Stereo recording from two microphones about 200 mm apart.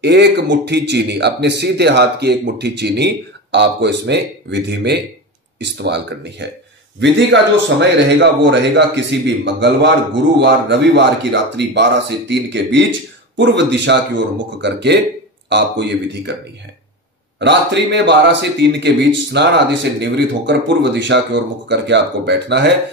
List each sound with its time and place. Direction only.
0.0 s a man's voice: 60° right (ahead or behind)
17.4 s a man's voice: 60° right (ahead or behind)